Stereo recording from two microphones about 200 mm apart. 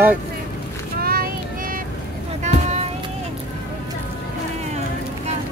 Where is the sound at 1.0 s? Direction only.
45° right (ahead or behind).